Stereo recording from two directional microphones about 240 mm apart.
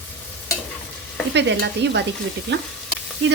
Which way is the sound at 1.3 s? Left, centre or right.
Right.